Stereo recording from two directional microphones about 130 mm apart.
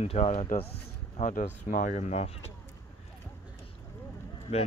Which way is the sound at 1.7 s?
70° left (ahead or behind).